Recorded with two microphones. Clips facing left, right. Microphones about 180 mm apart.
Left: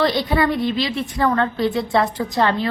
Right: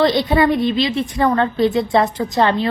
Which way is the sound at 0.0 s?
20° right (ahead or behind).